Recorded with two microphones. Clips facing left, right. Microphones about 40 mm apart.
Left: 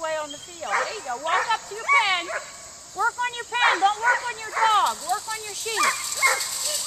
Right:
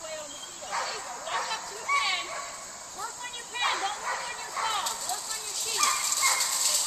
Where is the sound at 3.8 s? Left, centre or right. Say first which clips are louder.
Left 11 dB; left.